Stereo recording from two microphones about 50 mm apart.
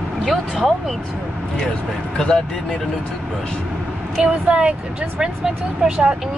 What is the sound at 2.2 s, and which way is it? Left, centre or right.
Speech, centre.